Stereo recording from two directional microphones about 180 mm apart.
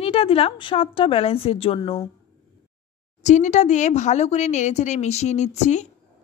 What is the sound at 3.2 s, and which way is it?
A woman's voice, 40° left (ahead or behind).